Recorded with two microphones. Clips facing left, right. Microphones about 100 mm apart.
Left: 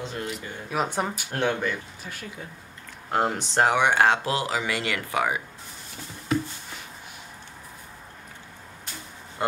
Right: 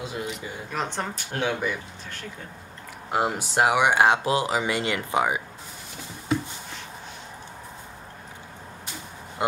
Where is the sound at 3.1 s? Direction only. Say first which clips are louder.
Even; 5° right (ahead or behind).